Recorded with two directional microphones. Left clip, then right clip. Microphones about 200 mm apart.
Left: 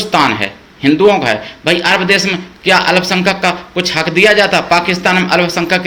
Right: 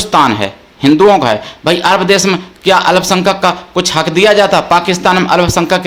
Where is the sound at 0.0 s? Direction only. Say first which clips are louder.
Right 2 dB; 25° right (ahead or behind).